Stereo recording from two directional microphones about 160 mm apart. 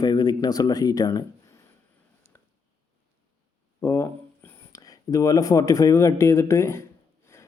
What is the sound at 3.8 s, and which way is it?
A man's voice, 15° left (ahead or behind).